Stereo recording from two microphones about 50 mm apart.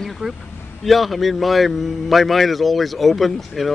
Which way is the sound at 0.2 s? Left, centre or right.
Right.